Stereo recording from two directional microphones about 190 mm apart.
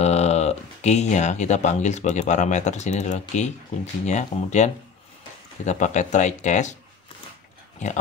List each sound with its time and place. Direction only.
0.0 s speech: 35° left (ahead or behind)
5.7 s speech: 40° left (ahead or behind)